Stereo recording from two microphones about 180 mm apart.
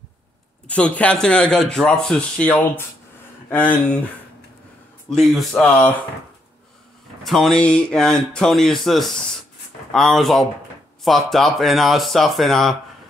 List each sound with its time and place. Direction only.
0.7 s speech: 5° left (ahead or behind)
5.3 s speech: centre (ahead or behind)
7.2 s speech: centre (ahead or behind)